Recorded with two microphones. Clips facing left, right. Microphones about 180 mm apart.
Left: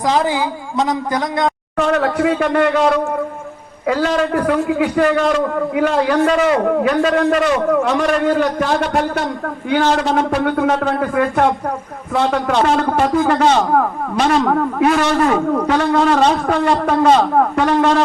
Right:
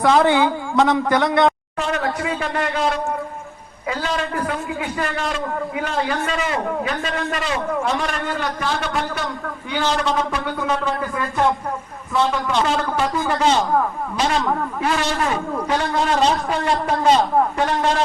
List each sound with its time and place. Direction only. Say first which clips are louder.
0.4 s a man's voice: right 2 dB; 25° right (ahead or behind)
1.8 s a man's voice: left 7 dB; 60° left (ahead or behind)
3.8 s a man's voice: left 8 dB; 55° left (ahead or behind)
7.7 s a man's voice: left 7 dB; 65° left (ahead or behind)